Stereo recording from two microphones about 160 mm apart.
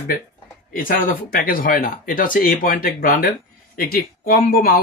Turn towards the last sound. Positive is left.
turn(degrees=65)  # may be behind; listen again after turning